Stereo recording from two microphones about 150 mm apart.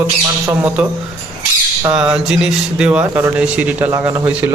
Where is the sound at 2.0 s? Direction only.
5° right (ahead or behind); by 4.2 s 20° right (ahead or behind).